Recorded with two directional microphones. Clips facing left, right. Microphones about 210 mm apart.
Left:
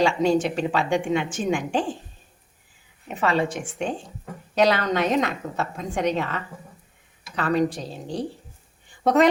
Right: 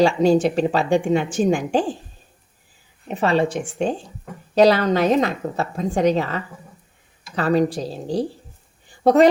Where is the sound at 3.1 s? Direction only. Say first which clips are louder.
Right 4 dB; 30° right (ahead or behind).